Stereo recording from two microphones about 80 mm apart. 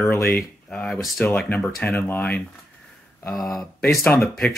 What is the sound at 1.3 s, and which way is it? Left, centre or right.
Speech, centre.